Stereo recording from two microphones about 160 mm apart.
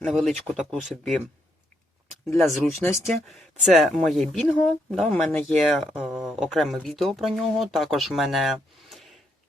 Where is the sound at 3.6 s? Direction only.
Centre (ahead or behind).